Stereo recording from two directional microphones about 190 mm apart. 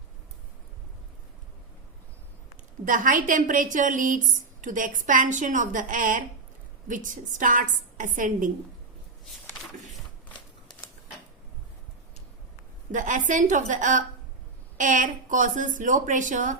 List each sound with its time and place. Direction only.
2.8 s a woman's voice: 45° right (ahead or behind)
12.9 s a woman's voice: 40° right (ahead or behind)